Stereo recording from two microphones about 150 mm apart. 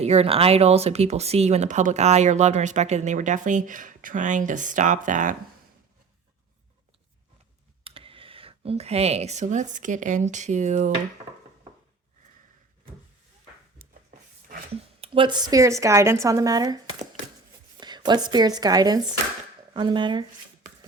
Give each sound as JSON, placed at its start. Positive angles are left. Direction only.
{"t": 0.0, "sound": "speech", "side_deg": -45}
{"t": 7.9, "sound": "speech", "side_deg": -35}
{"t": 15.0, "sound": "speech", "side_deg": -35}